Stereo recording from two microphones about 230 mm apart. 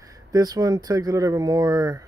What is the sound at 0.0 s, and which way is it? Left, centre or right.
Speech, centre.